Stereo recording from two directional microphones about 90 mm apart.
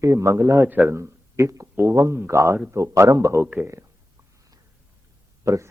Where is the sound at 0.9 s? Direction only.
30° right (ahead or behind).